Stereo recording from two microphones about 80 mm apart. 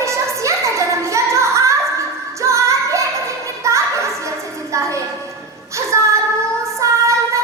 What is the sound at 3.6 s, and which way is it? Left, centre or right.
Children playing, right.